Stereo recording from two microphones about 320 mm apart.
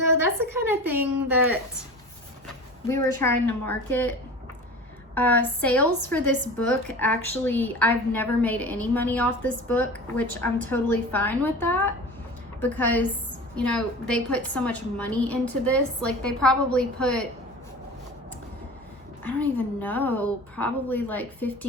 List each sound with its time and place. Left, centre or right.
0.1 s a woman's voice: left
2.8 s a woman's voice: centre
5.1 s a woman's voice: centre
19.2 s a woman's voice: centre